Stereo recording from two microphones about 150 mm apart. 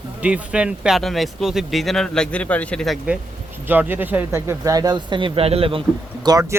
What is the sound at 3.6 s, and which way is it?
Speech, 15° right (ahead or behind).